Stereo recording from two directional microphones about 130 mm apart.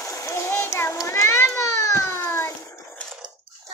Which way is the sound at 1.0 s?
20° left (ahead or behind).